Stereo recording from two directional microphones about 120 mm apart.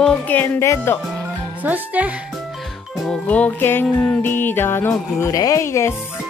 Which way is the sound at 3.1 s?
10° left (ahead or behind).